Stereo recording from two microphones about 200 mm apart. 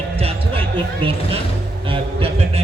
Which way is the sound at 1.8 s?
25° right (ahead or behind).